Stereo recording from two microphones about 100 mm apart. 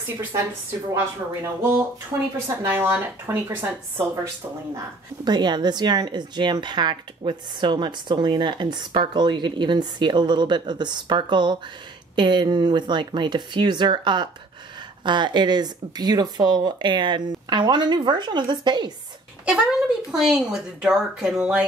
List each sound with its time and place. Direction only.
0.9 s speech: 25° right (ahead or behind)
5.2 s speech: 45° right (ahead or behind)
19.4 s speech: 5° right (ahead or behind)